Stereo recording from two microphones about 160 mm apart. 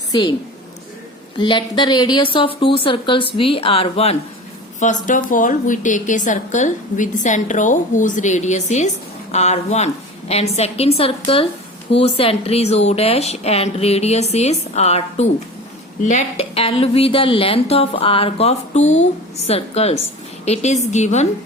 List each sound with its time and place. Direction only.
0.1 s a woman's voice: 30° left (ahead or behind)
1.4 s speech: 30° left (ahead or behind)
4.8 s a woman's voice: 50° left (ahead or behind)